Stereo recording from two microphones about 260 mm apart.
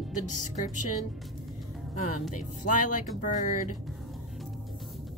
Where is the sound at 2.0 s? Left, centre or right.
Left.